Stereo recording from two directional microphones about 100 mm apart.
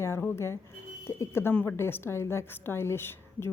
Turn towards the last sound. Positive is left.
turn(degrees=25)  # may be behind; listen again after turning